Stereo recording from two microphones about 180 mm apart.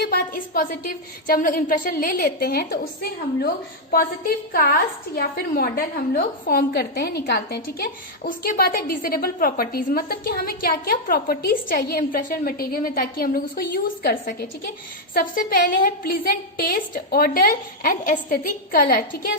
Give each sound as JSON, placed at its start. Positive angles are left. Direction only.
{"t": 0.0, "sound": "a woman's voice", "side_deg": 55}
{"t": 15.1, "sound": "a woman's voice", "side_deg": 55}